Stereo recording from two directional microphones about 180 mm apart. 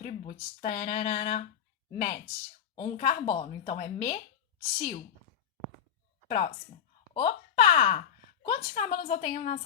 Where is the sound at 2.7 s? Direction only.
35° left (ahead or behind).